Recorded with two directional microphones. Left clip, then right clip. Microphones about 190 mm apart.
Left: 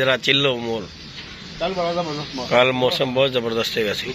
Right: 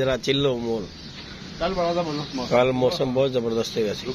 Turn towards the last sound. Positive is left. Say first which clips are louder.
# left 3 dB
turn(degrees=0)  # may be behind; listen again after turning